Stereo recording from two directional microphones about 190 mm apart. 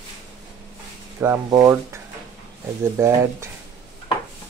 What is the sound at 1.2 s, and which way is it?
Speech, 15° right (ahead or behind).